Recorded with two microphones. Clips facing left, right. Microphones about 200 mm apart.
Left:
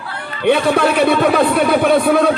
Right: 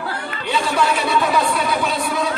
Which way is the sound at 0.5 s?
55° left (ahead or behind).